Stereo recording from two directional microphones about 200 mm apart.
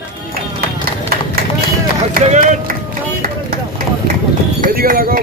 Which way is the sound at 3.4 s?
45° right (ahead or behind).